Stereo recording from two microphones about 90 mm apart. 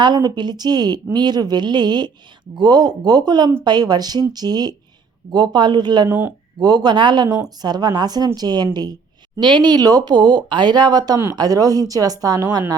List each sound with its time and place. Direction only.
0.0 s speech: 50° right (ahead or behind)
6.1 s speech: 25° right (ahead or behind)
6.6 s speech: 50° right (ahead or behind)